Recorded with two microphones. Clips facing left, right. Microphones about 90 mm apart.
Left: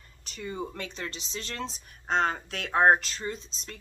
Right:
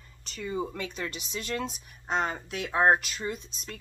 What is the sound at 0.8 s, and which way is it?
A woman's voice, 10° right (ahead or behind).